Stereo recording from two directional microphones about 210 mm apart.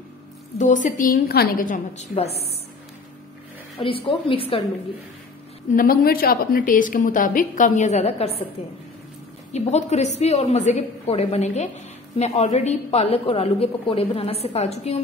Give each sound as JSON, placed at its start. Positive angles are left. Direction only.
{"t": 0.6, "sound": "a woman's voice", "side_deg": 35}
{"t": 3.8, "sound": "a woman's voice", "side_deg": 25}
{"t": 5.7, "sound": "a woman's voice", "side_deg": 45}
{"t": 9.5, "sound": "a woman's voice", "side_deg": 35}